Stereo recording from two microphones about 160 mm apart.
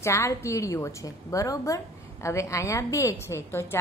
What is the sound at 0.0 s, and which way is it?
A woman's voice, 20° left (ahead or behind).